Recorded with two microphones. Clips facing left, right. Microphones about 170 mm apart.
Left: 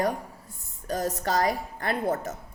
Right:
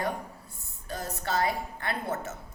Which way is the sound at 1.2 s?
40° left (ahead or behind).